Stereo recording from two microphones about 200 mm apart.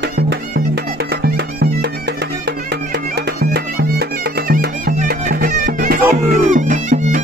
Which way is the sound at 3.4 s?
55° right (ahead or behind).